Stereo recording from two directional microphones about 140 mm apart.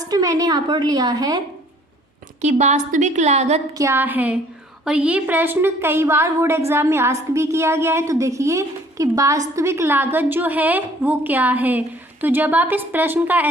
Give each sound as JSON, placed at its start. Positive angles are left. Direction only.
{"t": 0.1, "sound": "a woman's voice", "side_deg": -25}
{"t": 2.4, "sound": "a woman's voice", "side_deg": -55}
{"t": 3.8, "sound": "a woman's voice", "side_deg": -20}